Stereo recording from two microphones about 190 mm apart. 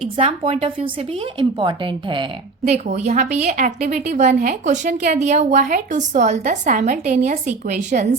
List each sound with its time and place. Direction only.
0.0 s speech: 30° right (ahead or behind)